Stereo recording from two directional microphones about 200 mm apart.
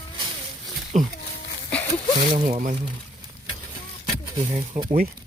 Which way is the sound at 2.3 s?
40° right (ahead or behind).